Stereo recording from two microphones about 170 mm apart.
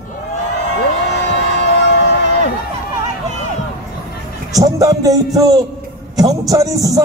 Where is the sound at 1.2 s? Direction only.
85° left.